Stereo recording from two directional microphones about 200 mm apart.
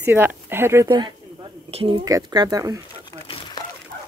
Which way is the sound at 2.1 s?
20° right (ahead or behind).